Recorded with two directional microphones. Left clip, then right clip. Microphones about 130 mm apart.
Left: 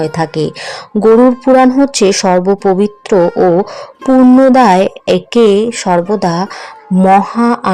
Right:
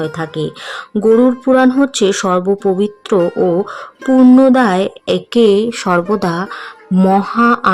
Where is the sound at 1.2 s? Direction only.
10° left (ahead or behind).